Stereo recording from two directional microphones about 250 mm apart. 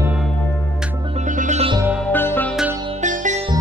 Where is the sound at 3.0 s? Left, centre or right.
Right.